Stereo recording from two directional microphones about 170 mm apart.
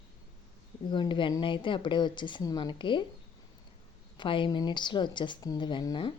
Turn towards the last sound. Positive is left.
turn(degrees=25)  # may be behind; listen again after turning